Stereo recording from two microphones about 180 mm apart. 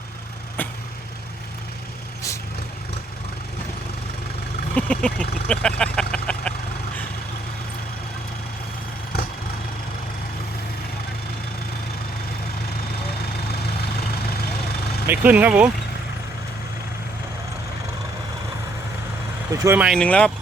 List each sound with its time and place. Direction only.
4.7 s speech: 5° left (ahead or behind)
15.0 s speech: 10° right (ahead or behind)
19.5 s speech: 15° right (ahead or behind)
19.9 s speech: 5° left (ahead or behind)